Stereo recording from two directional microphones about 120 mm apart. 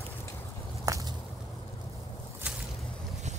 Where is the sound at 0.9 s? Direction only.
25° right (ahead or behind).